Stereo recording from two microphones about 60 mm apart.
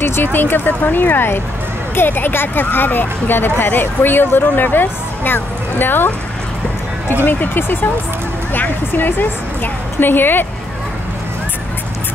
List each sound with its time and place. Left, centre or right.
0.0 s speech: left
7.2 s speech: left